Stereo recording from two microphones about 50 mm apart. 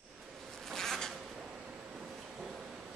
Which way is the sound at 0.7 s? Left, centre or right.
Centre.